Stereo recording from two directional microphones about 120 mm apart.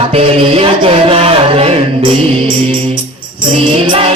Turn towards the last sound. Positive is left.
turn(degrees=-50)  # may be behind; listen again after turning